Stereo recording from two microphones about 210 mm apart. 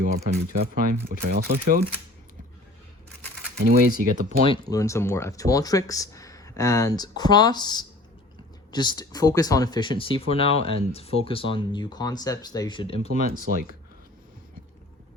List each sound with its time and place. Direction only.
0.0 s speech: 35° right (ahead or behind)
0.5 s speech: 45° right (ahead or behind)
3.6 s speech: 40° right (ahead or behind)
4.4 s speech: 15° left (ahead or behind)